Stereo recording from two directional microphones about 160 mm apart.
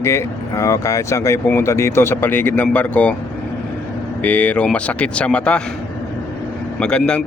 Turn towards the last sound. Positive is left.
turn(degrees=5)  # may be behind; listen again after turning